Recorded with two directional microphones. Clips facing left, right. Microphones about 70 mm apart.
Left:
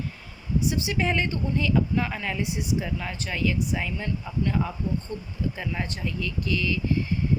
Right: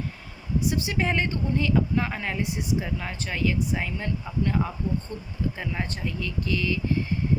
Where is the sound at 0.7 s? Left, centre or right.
Right.